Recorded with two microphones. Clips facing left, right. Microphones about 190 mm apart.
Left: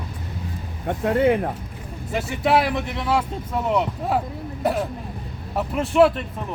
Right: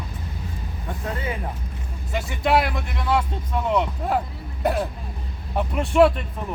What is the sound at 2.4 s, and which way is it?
Speech, 5° left (ahead or behind).